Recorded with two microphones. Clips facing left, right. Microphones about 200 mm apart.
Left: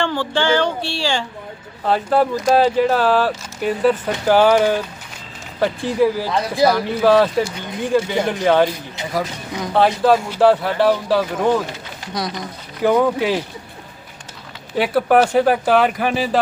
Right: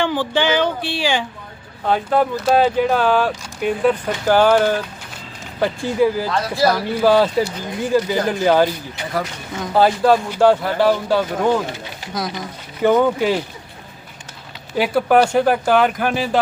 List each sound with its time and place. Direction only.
0.0 s a sound: 15° right (ahead or behind)
1.8 s speech: centre (ahead or behind)
14.8 s speech: centre (ahead or behind)